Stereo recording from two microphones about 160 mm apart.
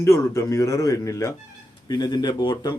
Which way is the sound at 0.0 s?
15° left (ahead or behind).